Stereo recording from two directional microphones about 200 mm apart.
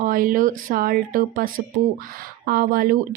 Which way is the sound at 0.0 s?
45° right (ahead or behind).